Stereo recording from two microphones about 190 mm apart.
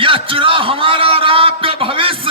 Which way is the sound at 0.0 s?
30° right (ahead or behind).